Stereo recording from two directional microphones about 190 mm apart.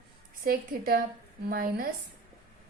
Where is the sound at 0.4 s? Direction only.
50° right (ahead or behind).